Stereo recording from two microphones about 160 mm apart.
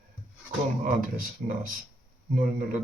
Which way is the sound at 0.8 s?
60° right (ahead or behind).